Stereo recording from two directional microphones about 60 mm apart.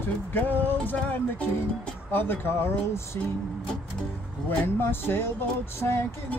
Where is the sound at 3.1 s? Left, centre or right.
Left.